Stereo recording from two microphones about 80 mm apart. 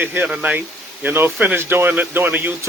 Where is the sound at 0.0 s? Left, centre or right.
Right.